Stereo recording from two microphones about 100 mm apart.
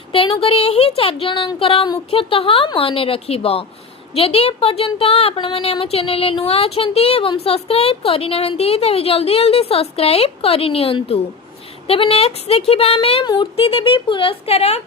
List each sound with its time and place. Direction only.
0.1 s speech: 65° left (ahead or behind)
13.2 s speech: 45° left (ahead or behind)
13.6 s speech: 65° left (ahead or behind); by 14.8 s 90° left